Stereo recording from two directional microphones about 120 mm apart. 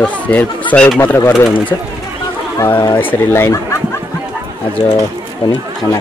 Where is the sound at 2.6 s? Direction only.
25° left (ahead or behind).